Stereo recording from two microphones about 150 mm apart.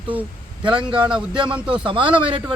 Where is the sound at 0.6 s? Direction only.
30° right (ahead or behind).